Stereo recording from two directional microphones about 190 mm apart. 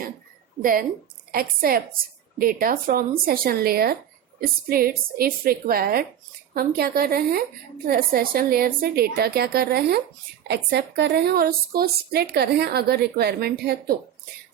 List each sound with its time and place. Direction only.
0.6 s a woman's voice: 50° right (ahead or behind)